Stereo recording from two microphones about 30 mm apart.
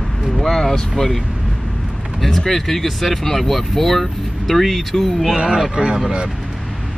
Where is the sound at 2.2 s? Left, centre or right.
Centre.